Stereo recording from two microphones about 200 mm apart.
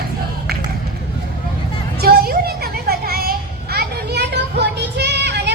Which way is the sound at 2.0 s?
50° right (ahead or behind).